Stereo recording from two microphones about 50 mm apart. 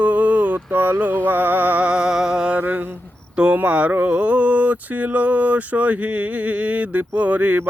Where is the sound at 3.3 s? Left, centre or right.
Right.